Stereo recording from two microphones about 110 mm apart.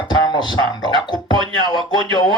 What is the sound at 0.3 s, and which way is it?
Speech, 40° left (ahead or behind).